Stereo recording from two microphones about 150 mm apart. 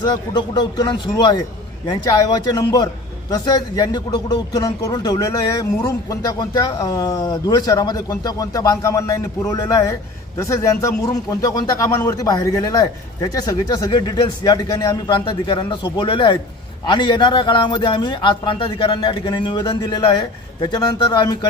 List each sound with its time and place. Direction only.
0.0 s a man's voice: 30° left (ahead or behind)